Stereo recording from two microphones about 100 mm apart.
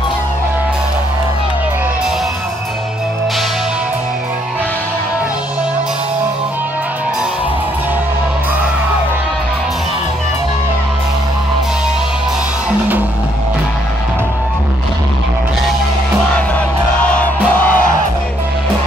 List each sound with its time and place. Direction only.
12.6 s music: 15° right (ahead or behind)
16.3 s music: 15° left (ahead or behind)